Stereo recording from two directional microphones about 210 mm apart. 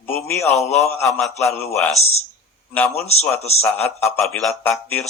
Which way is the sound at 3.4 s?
30° left (ahead or behind).